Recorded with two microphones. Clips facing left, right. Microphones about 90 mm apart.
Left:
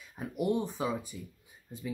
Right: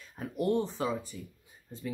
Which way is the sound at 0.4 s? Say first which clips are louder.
Right 1 dB; 10° left (ahead or behind).